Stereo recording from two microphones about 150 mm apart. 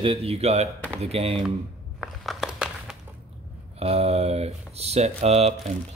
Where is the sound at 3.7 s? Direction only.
45° right (ahead or behind).